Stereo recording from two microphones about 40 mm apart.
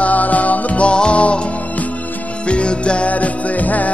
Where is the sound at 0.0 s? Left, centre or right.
Left.